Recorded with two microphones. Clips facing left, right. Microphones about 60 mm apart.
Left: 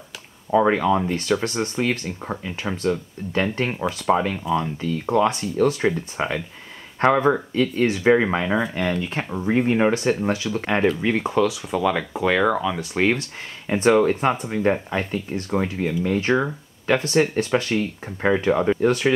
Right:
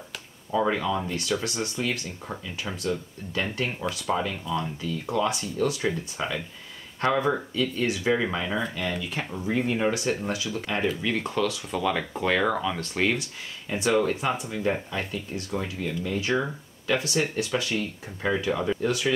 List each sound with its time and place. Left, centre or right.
0.5 s speech: left
4.0 s speech: left
11.0 s speech: left; by 12.8 s centre
12.9 s speech: left
13.7 s speech: left